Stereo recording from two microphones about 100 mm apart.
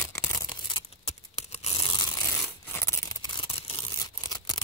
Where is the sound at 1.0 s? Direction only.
85° left.